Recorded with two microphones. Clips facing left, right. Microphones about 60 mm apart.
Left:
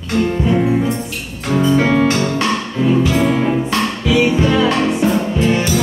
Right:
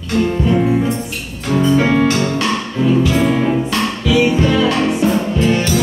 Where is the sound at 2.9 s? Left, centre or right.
Left.